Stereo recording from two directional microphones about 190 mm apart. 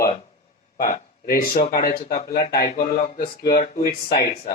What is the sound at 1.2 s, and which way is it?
A man's voice, 50° left (ahead or behind).